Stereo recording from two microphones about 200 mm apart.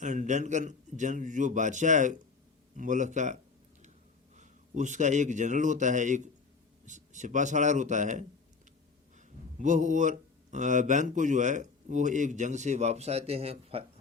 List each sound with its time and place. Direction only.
0.0 s a man's voice: 40° right (ahead or behind)
4.4 s a man's voice: 35° right (ahead or behind)